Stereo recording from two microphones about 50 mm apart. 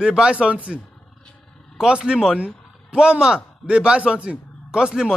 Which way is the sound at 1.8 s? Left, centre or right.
Centre.